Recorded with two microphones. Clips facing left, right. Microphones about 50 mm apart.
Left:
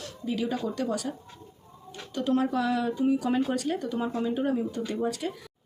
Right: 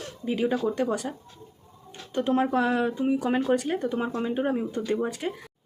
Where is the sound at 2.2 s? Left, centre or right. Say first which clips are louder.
Right 2 dB; right.